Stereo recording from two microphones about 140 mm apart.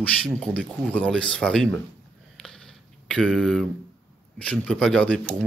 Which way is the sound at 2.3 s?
5° left (ahead or behind).